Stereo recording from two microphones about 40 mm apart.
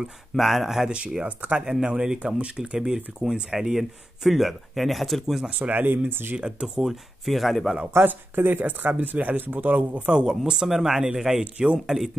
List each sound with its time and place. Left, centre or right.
0.4 s speech: centre
0.8 s speech: right
1.6 s speech: centre
3.2 s speech: centre
5.6 s speech: right
6.0 s speech: right
6.3 s speech: right
6.8 s speech: centre
8.4 s speech: right
10.0 s speech: right
11.4 s speech: right
11.8 s speech: centre